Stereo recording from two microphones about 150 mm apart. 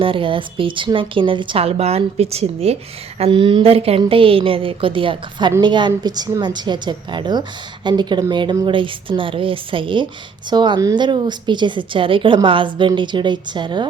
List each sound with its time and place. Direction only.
0.0 s a woman's voice: 35° right (ahead or behind)